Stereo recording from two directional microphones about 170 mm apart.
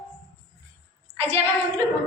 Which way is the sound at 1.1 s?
35° right (ahead or behind).